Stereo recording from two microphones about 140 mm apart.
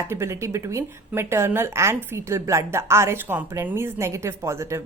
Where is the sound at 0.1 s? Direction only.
20° right (ahead or behind).